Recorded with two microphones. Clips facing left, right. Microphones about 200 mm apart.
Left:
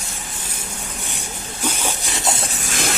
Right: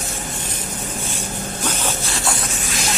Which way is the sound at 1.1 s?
10° left (ahead or behind).